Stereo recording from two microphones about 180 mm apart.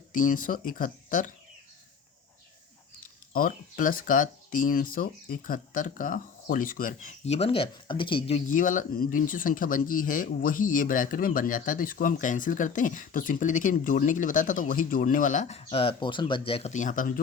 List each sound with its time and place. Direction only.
0.1 s speech: 50° left (ahead or behind)
3.3 s speech: 50° left (ahead or behind)
7.3 s speech: 35° left (ahead or behind)
8.4 s speech: 45° left (ahead or behind)